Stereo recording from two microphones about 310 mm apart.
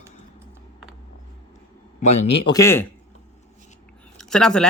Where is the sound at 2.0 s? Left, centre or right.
Left.